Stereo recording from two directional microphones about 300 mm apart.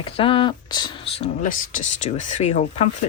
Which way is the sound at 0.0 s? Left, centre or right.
Centre.